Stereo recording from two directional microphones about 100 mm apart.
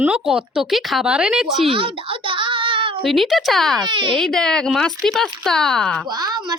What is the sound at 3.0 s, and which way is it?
Speech, centre (ahead or behind).